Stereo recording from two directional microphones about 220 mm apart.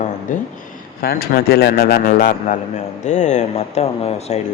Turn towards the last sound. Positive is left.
turn(degrees=30)  # may be behind; listen again after turning